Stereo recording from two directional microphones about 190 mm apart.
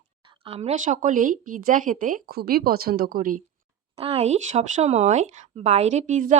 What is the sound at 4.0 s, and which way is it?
Speech, 35° right (ahead or behind).